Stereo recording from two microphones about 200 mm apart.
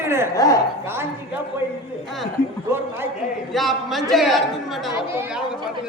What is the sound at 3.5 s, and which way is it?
Speech, centre (ahead or behind).